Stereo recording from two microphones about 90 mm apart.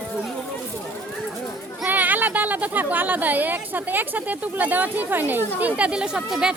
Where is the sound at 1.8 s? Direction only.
20° right (ahead or behind).